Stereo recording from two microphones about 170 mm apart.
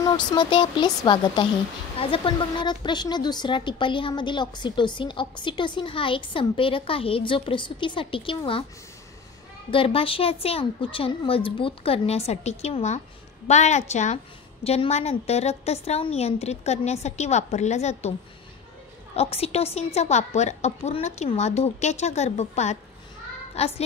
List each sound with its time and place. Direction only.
0.0 s a woman's voice: 25° left (ahead or behind)
9.7 s a woman's voice: 35° left (ahead or behind)
19.1 s a woman's voice: 35° left (ahead or behind)